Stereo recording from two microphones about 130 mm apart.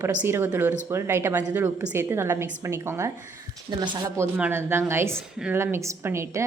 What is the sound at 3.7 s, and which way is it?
Speech, 35° right (ahead or behind).